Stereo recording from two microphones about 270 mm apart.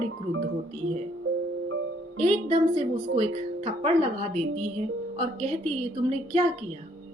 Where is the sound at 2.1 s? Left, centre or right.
Right.